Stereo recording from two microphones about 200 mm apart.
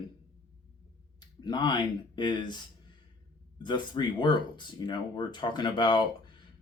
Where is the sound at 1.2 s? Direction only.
20° left (ahead or behind).